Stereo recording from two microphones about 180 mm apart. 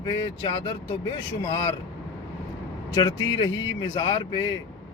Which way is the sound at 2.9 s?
25° left (ahead or behind).